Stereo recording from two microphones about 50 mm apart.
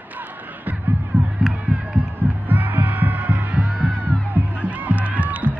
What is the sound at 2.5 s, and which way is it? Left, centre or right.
Music, right.